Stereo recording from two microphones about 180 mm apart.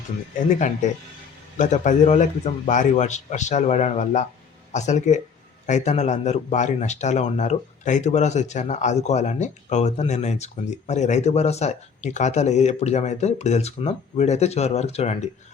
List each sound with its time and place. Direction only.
0.3 s a man's voice: 45° left (ahead or behind)